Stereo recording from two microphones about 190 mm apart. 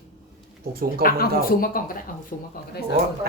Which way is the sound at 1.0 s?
50° left (ahead or behind).